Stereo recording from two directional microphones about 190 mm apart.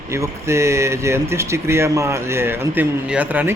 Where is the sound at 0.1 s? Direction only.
15° right (ahead or behind).